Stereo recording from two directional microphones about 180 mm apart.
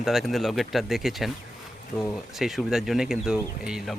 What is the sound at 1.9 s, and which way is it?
Speech, 10° left (ahead or behind).